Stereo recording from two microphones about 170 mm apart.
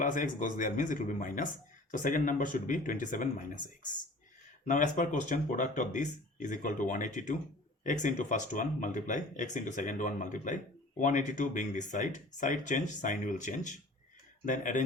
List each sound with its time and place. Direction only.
0.0 s speech: 50° left (ahead or behind)